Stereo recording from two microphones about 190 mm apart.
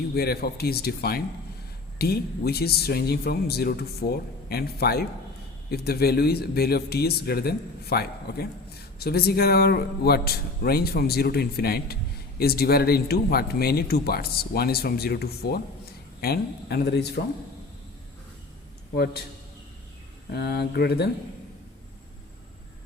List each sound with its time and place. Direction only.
0.1 s speech: 55° left (ahead or behind)
18.9 s speech: 60° left (ahead or behind)
20.3 s speech: 55° left (ahead or behind)